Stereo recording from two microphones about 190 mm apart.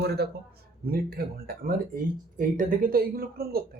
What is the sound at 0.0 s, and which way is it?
A man's voice, 60° right (ahead or behind).